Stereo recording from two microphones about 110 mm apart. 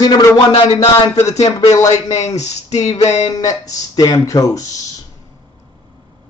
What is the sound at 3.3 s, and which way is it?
Speech, 35° left (ahead or behind).